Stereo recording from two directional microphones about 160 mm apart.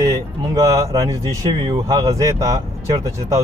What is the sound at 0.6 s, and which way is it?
Speech, 20° right (ahead or behind).